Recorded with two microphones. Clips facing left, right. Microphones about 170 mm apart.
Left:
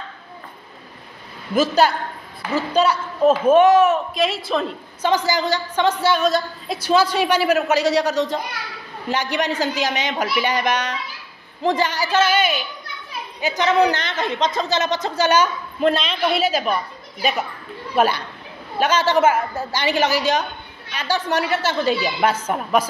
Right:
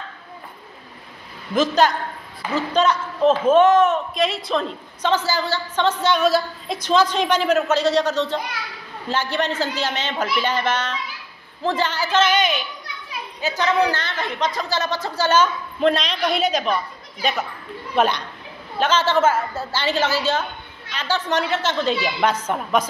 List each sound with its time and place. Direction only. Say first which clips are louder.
1.5 s a man's voice: left 1 dB; 10° left (ahead or behind)
6.2 s a man's voice: right 1 dB; 5° right (ahead or behind)
6.8 s a man's voice: left 1 dB; 10° left (ahead or behind)
13.4 s a man's voice: left 2 dB; 15° left (ahead or behind)